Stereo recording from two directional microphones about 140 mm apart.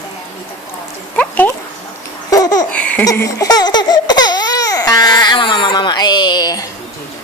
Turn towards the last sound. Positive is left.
turn(degrees=30)  # may be behind; listen again after turning